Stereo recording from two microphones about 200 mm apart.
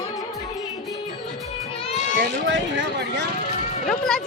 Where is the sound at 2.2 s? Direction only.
65° right (ahead or behind).